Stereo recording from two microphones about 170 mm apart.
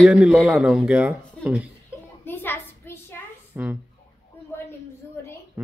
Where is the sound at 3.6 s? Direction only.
10° right (ahead or behind).